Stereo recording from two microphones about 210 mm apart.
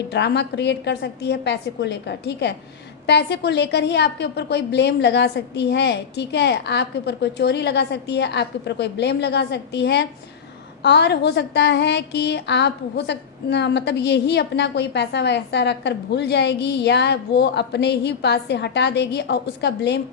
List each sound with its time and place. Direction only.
0.1 s a woman's voice: 55° left (ahead or behind)